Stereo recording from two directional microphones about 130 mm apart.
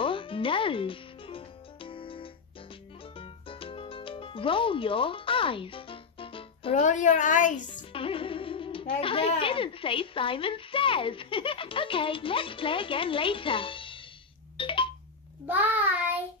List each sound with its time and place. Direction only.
0.0 s music: 40° left (ahead or behind)
6.7 s a child's voice: 70° left (ahead or behind)
7.9 s speech: 45° left (ahead or behind)
14.6 s a sound: 40° left (ahead or behind)
15.4 s child singing: 15° right (ahead or behind)